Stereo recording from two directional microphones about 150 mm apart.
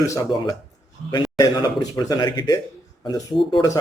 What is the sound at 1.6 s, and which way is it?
A man's voice, 25° left (ahead or behind).